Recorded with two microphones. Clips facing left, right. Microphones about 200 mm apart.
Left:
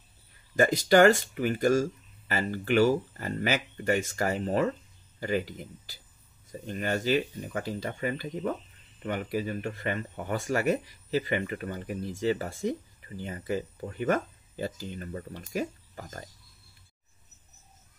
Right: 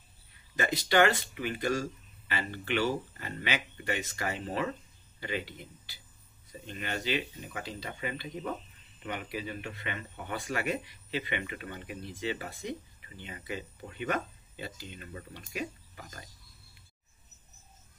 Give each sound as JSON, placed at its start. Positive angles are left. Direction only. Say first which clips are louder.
{"t": 0.6, "sound": "speech", "louder": "left 6 dB", "side_deg": 45}